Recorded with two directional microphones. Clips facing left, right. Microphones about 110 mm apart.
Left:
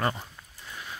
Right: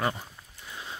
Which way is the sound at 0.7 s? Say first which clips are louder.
Even; 25° right (ahead or behind).